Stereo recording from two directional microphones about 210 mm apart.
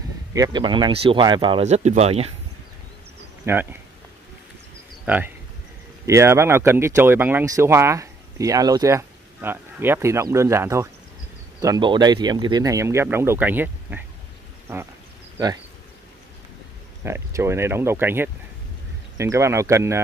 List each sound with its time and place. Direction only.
0.3 s speech: 20° right (ahead or behind)
3.4 s speech: 15° right (ahead or behind)
5.0 s speech: 10° right (ahead or behind)
17.0 s speech: 10° right (ahead or behind)